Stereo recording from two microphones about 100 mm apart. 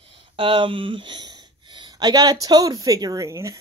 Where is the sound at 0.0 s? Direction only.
70° right (ahead or behind); by 2.3 s 40° right (ahead or behind).